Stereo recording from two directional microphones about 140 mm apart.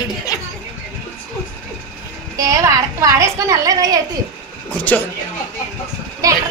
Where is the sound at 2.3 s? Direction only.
25° right (ahead or behind).